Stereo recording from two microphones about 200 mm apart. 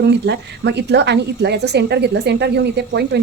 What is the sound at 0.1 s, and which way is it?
Speech, 60° right (ahead or behind).